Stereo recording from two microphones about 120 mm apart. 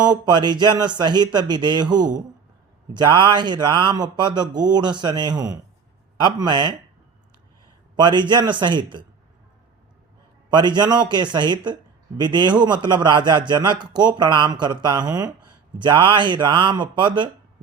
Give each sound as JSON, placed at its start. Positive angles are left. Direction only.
{"t": 0.0, "sound": "a man's voice", "side_deg": -35}
{"t": 7.9, "sound": "a man's voice", "side_deg": -35}
{"t": 10.5, "sound": "a man's voice", "side_deg": -35}